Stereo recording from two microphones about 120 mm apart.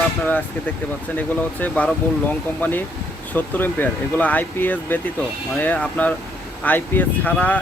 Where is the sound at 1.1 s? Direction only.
15° left (ahead or behind).